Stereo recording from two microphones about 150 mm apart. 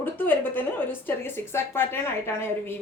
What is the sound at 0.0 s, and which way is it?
A woman's voice, 10° left (ahead or behind).